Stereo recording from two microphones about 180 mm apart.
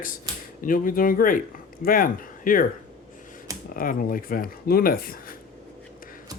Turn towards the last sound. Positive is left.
turn(degrees=55)  # may be behind; listen again after turning